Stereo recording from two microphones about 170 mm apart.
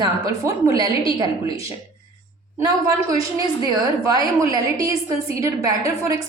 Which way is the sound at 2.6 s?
20° right (ahead or behind).